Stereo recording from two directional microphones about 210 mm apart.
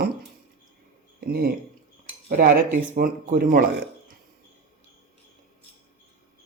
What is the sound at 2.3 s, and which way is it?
Speech, 40° right (ahead or behind).